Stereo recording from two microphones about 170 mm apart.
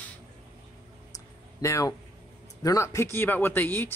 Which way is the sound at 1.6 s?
20° left (ahead or behind).